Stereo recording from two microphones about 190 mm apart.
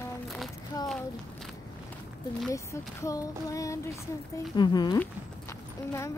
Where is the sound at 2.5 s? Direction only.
15° left (ahead or behind).